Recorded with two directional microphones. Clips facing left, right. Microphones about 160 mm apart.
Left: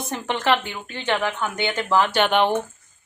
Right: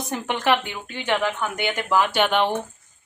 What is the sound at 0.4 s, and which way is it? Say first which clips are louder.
A woman's voice: even; 15° right (ahead or behind).